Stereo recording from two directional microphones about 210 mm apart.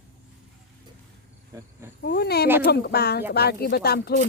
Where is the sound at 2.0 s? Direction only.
50° left (ahead or behind).